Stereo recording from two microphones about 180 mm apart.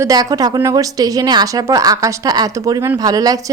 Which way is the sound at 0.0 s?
20° right (ahead or behind).